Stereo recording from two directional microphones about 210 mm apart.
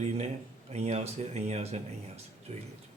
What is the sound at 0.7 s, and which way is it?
Speech, 30° right (ahead or behind).